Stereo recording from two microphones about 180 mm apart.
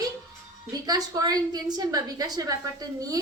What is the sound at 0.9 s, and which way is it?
A woman's voice, 20° right (ahead or behind).